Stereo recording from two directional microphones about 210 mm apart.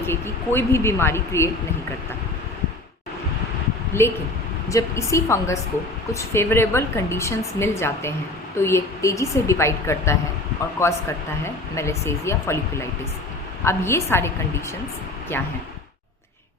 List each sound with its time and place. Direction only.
0.0 s a woman's voice: 10° left (ahead or behind)
3.9 s a woman's voice: 10° left (ahead or behind)